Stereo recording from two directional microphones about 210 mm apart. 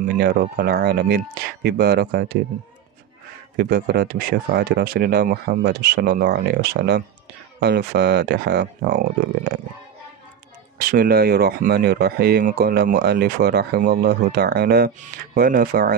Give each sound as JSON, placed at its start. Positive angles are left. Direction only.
{"t": 0.0, "sound": "speech", "side_deg": -45}
{"t": 3.5, "sound": "speech", "side_deg": -50}
{"t": 10.8, "sound": "speech", "side_deg": -45}